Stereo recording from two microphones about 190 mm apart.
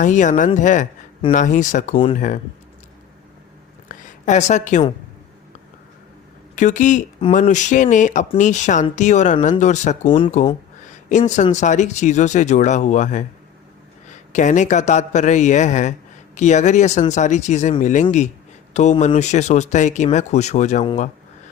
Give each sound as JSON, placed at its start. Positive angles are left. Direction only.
{"t": 0.0, "sound": "a man's voice", "side_deg": 40}
{"t": 3.8, "sound": "a sound", "side_deg": 40}
{"t": 6.6, "sound": "a man's voice", "side_deg": 40}
{"t": 10.1, "sound": "speech", "side_deg": 25}
{"t": 11.1, "sound": "a man's voice", "side_deg": 40}